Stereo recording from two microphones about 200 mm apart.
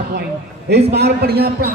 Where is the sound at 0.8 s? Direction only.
55° right (ahead or behind).